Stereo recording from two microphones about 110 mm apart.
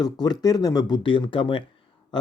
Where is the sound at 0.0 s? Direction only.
40° left (ahead or behind).